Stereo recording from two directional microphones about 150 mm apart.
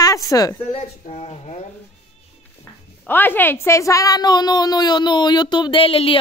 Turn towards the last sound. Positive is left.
turn(degrees=40)  # may be behind; listen again after turning